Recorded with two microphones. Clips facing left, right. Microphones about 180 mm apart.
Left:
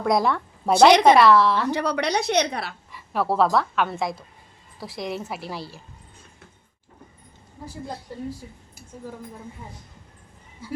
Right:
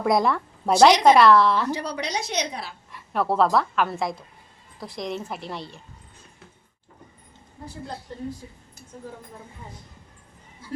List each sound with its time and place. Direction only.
0.0 s a woman's voice: centre (ahead or behind)
1.7 s a woman's voice: 65° left (ahead or behind)
2.9 s a woman's voice: centre (ahead or behind)
8.1 s speech: 10° left (ahead or behind)